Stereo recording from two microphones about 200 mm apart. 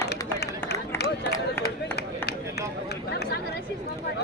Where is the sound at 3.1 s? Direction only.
55° left (ahead or behind).